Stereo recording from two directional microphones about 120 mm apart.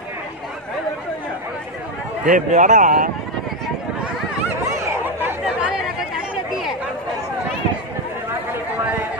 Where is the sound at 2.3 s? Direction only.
90° right.